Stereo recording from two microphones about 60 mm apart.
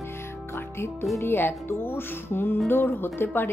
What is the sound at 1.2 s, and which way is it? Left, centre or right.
Speech, left.